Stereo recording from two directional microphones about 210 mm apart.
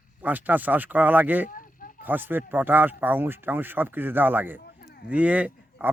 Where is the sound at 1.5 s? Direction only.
40° left (ahead or behind).